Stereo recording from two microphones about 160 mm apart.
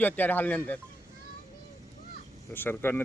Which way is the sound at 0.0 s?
10° left (ahead or behind).